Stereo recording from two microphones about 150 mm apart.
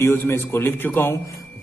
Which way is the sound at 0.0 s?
15° left (ahead or behind).